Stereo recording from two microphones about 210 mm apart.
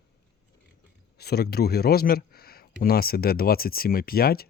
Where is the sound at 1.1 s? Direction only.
50° left (ahead or behind).